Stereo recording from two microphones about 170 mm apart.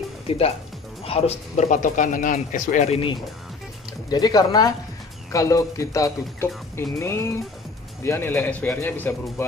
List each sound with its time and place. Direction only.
1.0 s speech: 35° left (ahead or behind)
4.1 s speech: 25° left (ahead or behind)